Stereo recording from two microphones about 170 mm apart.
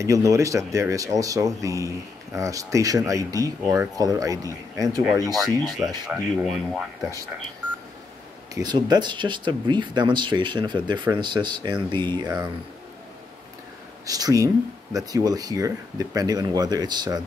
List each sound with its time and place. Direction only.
0.0 s speech: 20° right (ahead or behind)
5.3 s speech: centre (ahead or behind)
8.5 s speech: 25° right (ahead or behind)
14.0 s speech: 20° right (ahead or behind)